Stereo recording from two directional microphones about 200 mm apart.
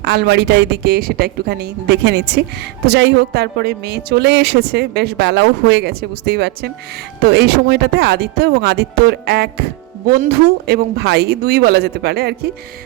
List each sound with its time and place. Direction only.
0.0 s speech: 55° right (ahead or behind)
10.7 s speech: 55° right (ahead or behind)